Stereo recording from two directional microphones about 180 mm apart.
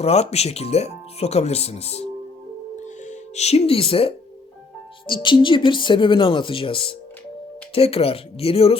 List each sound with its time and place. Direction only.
0.0 s speech: 35° left (ahead or behind)
2.7 s music: 40° left (ahead or behind)
5.0 s speech: 25° left (ahead or behind)